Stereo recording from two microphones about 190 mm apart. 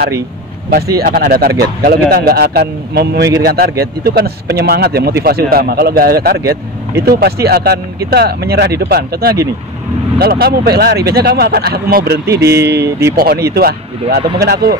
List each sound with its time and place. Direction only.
0.9 s a man's voice: 55° right (ahead or behind)
12.3 s speech: 15° right (ahead or behind)
13.1 s a man's voice: 50° right (ahead or behind)